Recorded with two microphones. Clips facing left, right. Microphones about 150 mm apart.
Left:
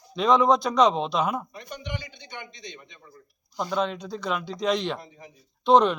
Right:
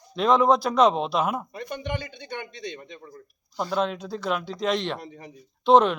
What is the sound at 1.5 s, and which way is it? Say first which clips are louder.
A man's voice: right 5 dB; 55° right (ahead or behind).